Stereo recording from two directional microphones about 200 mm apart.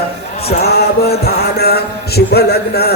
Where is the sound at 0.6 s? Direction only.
50° left (ahead or behind).